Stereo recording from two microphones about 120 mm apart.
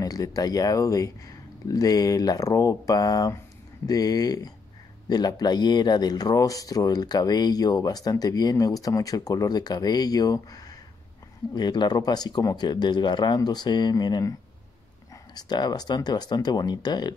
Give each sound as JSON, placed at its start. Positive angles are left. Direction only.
{"t": 0.0, "sound": "speech", "side_deg": 30}
{"t": 15.3, "sound": "speech", "side_deg": 35}